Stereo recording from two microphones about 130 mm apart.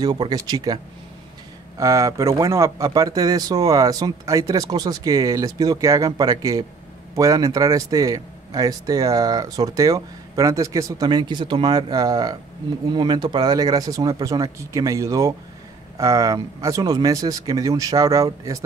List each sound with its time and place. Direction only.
0.0 s speech: 30° right (ahead or behind)
1.8 s a man's voice: 25° right (ahead or behind)